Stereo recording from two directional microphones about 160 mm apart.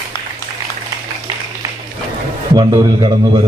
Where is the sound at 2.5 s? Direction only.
25° right (ahead or behind).